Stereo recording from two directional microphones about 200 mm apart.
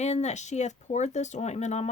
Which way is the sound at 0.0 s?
35° left (ahead or behind).